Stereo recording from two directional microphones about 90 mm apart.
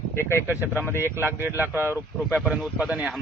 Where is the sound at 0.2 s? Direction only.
30° left (ahead or behind).